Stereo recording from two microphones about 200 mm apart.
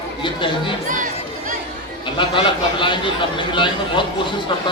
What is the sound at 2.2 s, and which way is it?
A man's voice, 25° left (ahead or behind).